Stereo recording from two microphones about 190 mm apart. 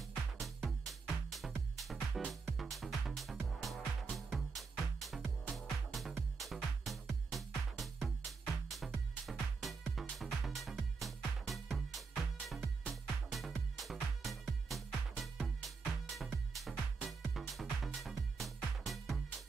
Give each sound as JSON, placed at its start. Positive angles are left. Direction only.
{"t": 0.7, "sound": "music", "side_deg": 0}